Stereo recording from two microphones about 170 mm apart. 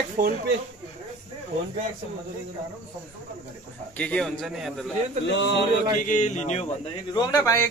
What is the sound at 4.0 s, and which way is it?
Speech, 5° left (ahead or behind).